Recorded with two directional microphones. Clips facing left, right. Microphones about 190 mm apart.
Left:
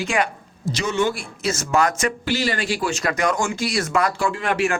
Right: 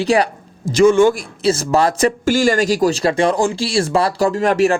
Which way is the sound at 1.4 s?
30° right (ahead or behind).